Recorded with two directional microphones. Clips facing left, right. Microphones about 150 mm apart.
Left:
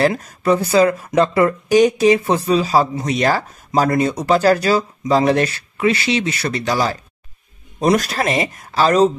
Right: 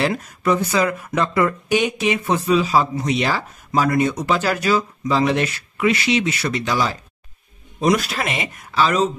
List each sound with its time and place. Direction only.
0.2 s speech: 35° left (ahead or behind)